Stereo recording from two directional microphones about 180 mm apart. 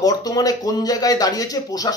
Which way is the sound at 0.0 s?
20° left (ahead or behind).